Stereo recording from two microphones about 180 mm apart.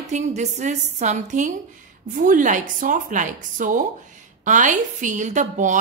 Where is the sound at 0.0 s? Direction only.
40° right (ahead or behind).